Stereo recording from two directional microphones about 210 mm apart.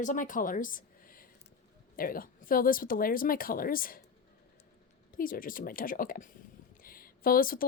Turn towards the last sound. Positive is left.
turn(degrees=45)  # may be behind; listen again after turning